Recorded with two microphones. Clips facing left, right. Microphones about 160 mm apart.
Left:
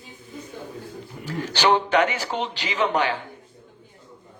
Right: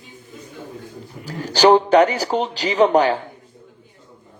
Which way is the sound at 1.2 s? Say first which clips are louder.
Right 7 dB; 40° right (ahead or behind).